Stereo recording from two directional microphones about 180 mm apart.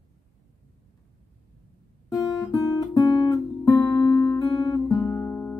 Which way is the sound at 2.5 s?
20° left (ahead or behind).